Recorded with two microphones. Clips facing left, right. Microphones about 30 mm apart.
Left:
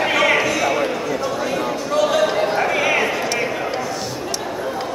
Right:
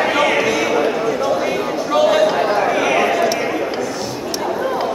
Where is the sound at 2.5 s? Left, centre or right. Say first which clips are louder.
Right 2 dB; centre.